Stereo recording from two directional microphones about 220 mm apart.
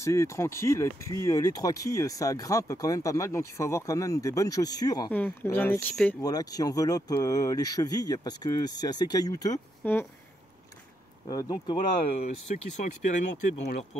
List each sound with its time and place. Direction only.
0.0 s speech: 15° left (ahead or behind)
6.2 s speech: 15° left (ahead or behind)
11.2 s speech: 15° left (ahead or behind)
13.1 s speech: 30° left (ahead or behind)